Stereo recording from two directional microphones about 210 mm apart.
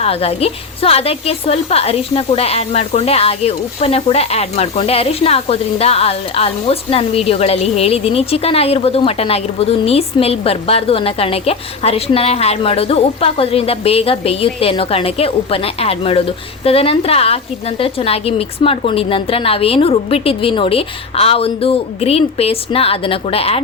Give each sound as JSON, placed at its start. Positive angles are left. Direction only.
{"t": 0.0, "sound": "a woman's voice", "side_deg": 30}